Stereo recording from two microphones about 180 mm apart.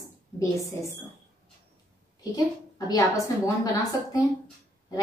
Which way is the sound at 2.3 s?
20° left (ahead or behind).